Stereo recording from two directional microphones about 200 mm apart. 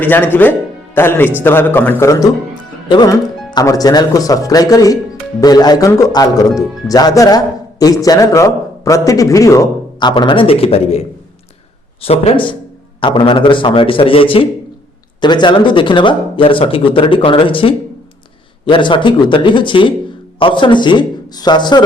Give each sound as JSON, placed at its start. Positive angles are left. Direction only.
{"t": 0.0, "sound": "speech", "side_deg": 10}
{"t": 12.0, "sound": "speech", "side_deg": 30}